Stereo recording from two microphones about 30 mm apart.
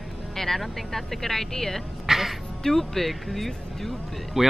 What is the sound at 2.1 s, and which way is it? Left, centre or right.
Quack, centre.